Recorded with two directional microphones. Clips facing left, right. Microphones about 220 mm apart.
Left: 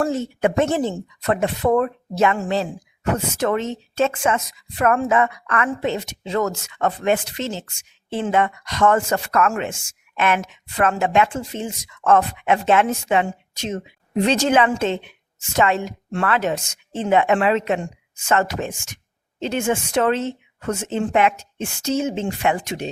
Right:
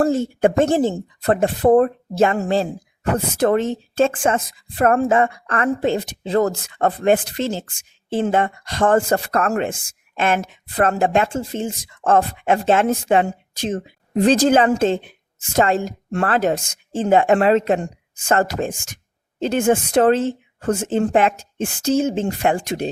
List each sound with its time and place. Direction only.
0.0 s a woman's voice: 30° right (ahead or behind)
19.7 s a woman's voice: 35° right (ahead or behind)